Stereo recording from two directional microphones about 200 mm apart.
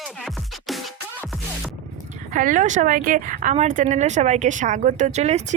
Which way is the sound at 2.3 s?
40° right (ahead or behind).